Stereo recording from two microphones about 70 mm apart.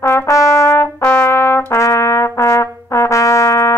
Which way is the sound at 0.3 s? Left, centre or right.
Left.